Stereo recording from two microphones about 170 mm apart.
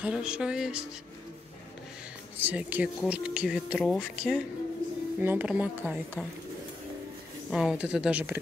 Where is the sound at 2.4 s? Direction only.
10° right (ahead or behind).